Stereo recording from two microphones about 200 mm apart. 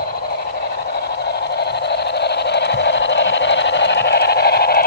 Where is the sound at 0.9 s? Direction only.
55° left (ahead or behind).